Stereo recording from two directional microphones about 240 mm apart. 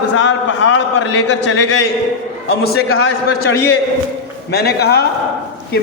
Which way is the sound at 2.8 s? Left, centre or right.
Left.